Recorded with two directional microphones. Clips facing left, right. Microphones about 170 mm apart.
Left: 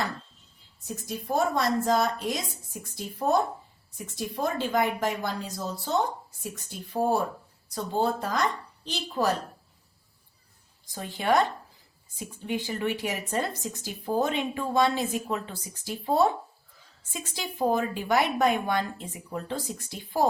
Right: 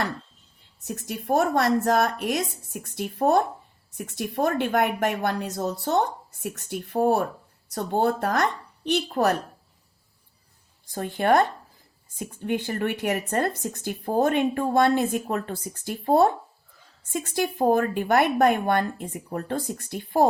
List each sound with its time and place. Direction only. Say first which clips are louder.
0.9 s speech: right 5 dB; 65° right (ahead or behind)
10.9 s speech: right 4 dB; 55° right (ahead or behind)